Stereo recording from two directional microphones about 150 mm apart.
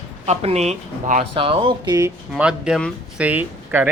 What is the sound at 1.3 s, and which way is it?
Speech, 35° right (ahead or behind).